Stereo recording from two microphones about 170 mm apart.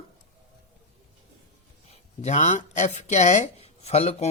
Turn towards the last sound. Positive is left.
turn(degrees=40)  # may be behind; listen again after turning